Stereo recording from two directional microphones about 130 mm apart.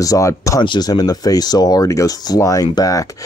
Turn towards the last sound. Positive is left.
turn(degrees=25)  # may be behind; listen again after turning